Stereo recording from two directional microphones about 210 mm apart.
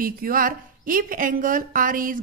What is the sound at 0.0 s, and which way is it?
A woman's voice, 45° right (ahead or behind).